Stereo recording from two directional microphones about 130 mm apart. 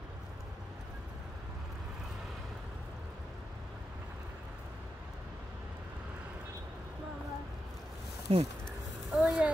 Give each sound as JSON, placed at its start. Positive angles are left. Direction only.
{"t": 8.3, "sound": "speech", "side_deg": -45}
{"t": 9.1, "sound": "speech", "side_deg": -5}